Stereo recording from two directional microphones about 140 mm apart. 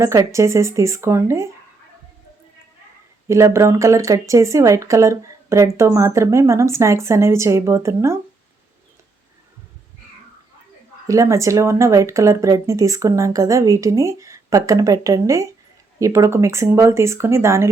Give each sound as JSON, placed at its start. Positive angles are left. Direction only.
{"t": 0.0, "sound": "speech", "side_deg": -20}
{"t": 3.2, "sound": "speech", "side_deg": -20}
{"t": 11.0, "sound": "speech", "side_deg": -25}